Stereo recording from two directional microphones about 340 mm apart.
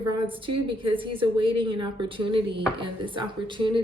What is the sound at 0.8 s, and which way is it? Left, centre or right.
Speech, centre.